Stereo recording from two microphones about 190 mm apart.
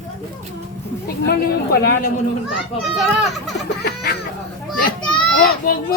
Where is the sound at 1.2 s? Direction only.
55° left (ahead or behind).